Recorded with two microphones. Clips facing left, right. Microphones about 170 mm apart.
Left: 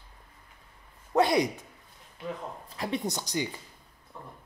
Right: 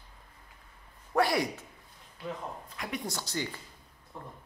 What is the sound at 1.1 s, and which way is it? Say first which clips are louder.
Speech: left 4 dB; 20° left (ahead or behind).